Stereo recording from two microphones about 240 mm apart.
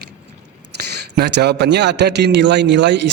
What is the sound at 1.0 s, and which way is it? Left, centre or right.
A man's voice, right.